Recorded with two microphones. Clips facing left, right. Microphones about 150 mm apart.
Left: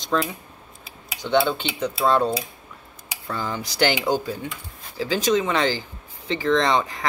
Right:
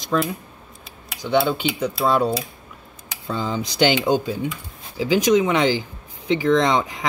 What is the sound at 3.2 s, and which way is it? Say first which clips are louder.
Speech: right 4 dB; 20° right (ahead or behind).